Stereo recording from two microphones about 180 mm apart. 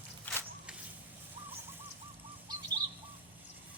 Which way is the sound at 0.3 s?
10° left (ahead or behind).